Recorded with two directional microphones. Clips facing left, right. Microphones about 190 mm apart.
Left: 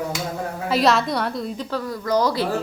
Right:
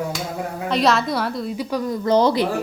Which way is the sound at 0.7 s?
Centre (ahead or behind).